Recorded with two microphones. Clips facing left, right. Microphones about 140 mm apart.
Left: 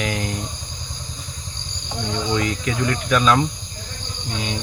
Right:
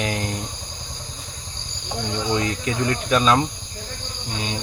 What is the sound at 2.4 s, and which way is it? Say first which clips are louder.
Speech: left 1 dB; 30° right (ahead or behind).